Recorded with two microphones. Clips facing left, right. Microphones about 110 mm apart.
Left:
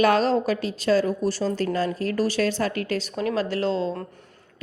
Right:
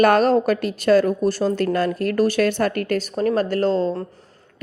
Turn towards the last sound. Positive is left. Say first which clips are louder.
# right 5 dB
turn(degrees=-45)  # may be behind; listen again after turning